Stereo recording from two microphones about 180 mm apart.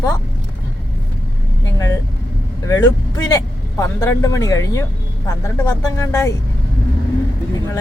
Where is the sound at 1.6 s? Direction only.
15° left (ahead or behind).